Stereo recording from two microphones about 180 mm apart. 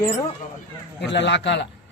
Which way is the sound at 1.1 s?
80° left.